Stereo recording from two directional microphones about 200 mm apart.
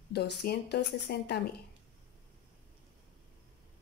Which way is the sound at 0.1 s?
55° left (ahead or behind).